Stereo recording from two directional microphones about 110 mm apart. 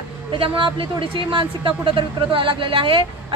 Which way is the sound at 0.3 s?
50° right (ahead or behind).